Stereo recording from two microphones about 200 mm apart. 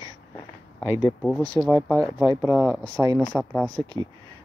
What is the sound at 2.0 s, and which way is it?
Speech, 15° right (ahead or behind).